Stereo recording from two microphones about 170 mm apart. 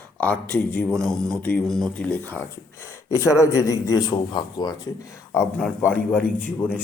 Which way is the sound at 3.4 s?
20° left (ahead or behind).